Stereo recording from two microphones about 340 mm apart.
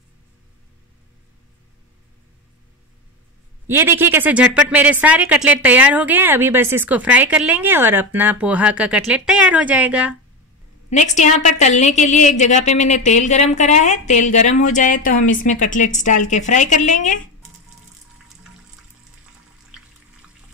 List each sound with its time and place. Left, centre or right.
3.6 s speech: centre
10.9 s a woman's voice: left